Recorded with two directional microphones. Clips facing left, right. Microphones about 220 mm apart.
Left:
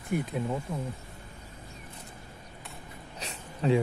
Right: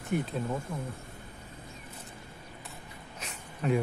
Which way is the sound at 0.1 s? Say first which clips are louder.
Even; 10° left (ahead or behind).